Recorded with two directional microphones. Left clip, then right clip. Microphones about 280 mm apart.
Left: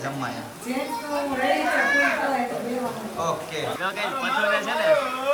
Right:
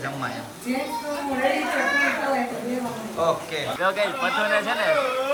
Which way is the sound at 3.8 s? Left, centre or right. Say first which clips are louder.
Right 7 dB; centre.